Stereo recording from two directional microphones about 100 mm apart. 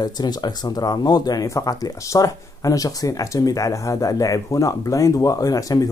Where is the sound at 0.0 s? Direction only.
45° left (ahead or behind).